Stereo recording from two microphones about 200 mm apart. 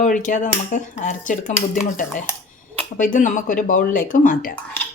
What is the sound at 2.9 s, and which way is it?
Cutlery, 40° left (ahead or behind).